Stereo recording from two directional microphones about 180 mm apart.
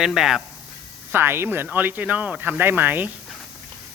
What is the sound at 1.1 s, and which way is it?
Speech, 10° right (ahead or behind).